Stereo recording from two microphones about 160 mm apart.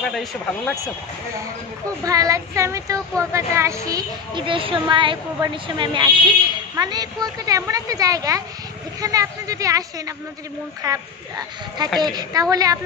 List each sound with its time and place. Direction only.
0.1 s speech: centre (ahead or behind)
2.0 s speech: 20° right (ahead or behind)
4.3 s a woman's voice: 30° right (ahead or behind)